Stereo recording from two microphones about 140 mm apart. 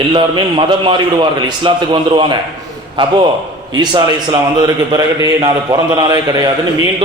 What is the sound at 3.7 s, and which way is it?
A man's voice, 30° right (ahead or behind).